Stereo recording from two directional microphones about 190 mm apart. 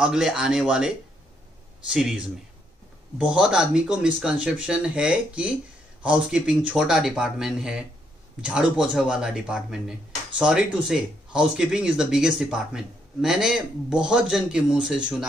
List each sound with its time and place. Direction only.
0.0 s speech: 5° right (ahead or behind)